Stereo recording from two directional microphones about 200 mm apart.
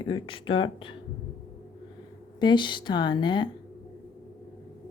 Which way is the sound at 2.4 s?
25° left (ahead or behind).